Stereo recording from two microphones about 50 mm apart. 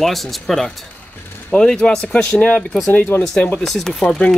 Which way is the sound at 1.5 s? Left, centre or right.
Centre.